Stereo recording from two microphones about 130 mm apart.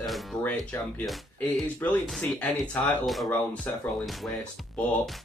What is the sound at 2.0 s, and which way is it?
Speech, centre (ahead or behind).